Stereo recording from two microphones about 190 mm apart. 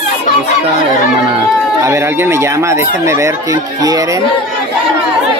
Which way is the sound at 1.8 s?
15° right (ahead or behind).